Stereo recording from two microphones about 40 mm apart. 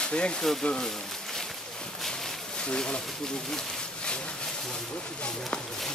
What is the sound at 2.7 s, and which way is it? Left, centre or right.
Speech, left.